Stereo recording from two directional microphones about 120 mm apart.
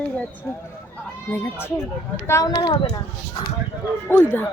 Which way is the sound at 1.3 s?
20° left (ahead or behind).